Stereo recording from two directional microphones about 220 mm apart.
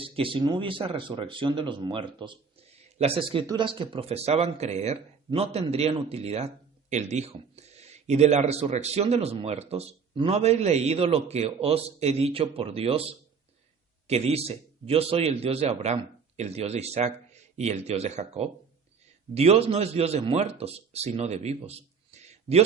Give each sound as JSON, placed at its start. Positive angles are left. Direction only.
{"t": 0.0, "sound": "a man's voice", "side_deg": -25}